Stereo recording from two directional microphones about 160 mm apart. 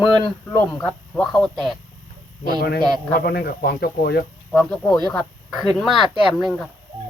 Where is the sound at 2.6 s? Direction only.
75° left (ahead or behind); by 4.2 s 90° left.